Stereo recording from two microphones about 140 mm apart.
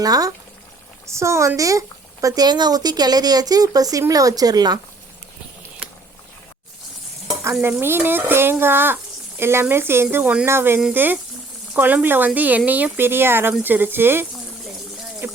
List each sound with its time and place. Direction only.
0.0 s a woman's voice: 25° right (ahead or behind)
7.8 s speech: 15° right (ahead or behind)
15.2 s a sound: 15° right (ahead or behind)